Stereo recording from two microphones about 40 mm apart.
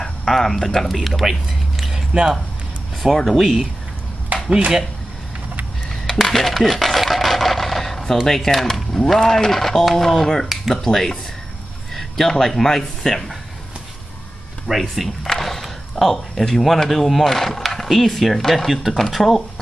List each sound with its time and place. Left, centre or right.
0.0 s speech: centre
2.1 s speech: right
3.0 s speech: centre
4.3 s a sound: right
5.9 s a sound: centre
8.3 s speech: centre
14.7 s speech: centre
15.2 s a sound: centre
16.4 s speech: centre